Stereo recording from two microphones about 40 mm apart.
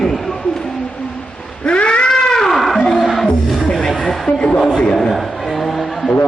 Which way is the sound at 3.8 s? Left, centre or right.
Centre.